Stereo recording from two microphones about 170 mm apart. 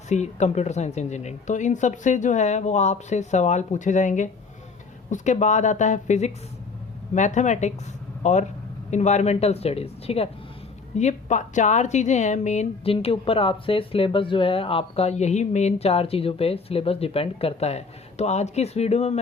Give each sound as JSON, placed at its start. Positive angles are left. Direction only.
{"t": 0.1, "sound": "speech", "side_deg": 40}